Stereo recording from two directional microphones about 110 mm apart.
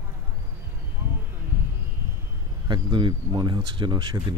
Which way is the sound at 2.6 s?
40° right (ahead or behind).